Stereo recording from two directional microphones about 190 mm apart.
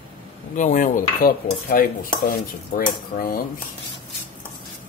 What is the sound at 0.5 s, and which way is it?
Cutlery, 40° left (ahead or behind).